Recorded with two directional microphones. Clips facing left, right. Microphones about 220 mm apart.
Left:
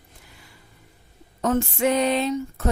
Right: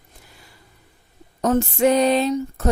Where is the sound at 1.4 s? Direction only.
40° right (ahead or behind).